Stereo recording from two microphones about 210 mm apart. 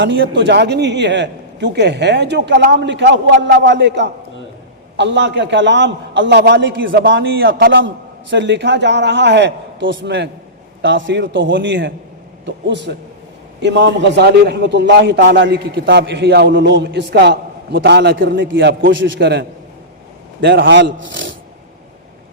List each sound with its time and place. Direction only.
0.0 s a man's voice: 55° right (ahead or behind)
18.4 s a man's voice: 60° right (ahead or behind)